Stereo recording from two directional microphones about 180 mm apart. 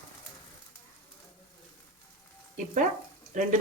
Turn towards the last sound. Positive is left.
turn(degrees=-45)  # may be behind; listen again after turning